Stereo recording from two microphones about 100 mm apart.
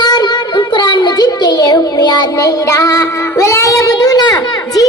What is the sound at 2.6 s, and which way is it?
Child singing, 35° left (ahead or behind).